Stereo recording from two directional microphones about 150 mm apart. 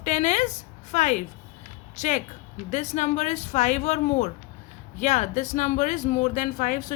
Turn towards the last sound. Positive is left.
turn(degrees=60)  # may be behind; listen again after turning